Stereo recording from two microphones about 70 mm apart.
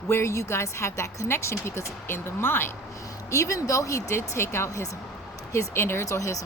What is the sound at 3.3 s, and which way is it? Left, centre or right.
A woman's voice, left.